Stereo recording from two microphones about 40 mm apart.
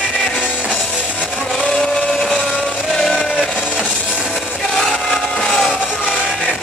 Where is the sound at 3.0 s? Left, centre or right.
Centre.